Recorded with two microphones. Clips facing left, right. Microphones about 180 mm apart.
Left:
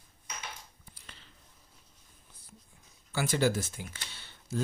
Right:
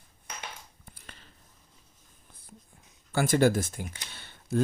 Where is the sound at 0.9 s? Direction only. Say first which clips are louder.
Right 3 dB; 50° right (ahead or behind).